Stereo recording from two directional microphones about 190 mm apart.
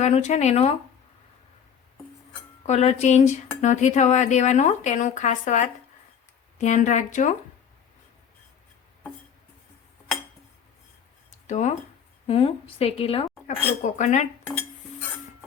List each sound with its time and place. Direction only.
0.0 s speech: 40° left (ahead or behind)
2.6 s speech: 35° left (ahead or behind)
11.3 s a sound: 40° left (ahead or behind)
12.3 s speech: 30° left (ahead or behind)